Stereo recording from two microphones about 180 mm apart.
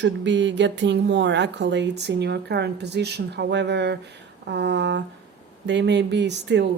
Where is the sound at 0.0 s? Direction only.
80° right.